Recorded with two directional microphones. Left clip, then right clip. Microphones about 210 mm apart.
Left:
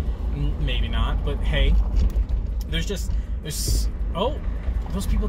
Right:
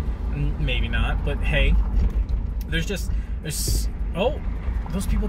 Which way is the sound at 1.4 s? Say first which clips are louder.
Right 3 dB; 10° right (ahead or behind).